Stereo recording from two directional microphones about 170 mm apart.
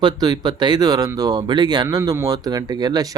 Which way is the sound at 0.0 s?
25° right (ahead or behind).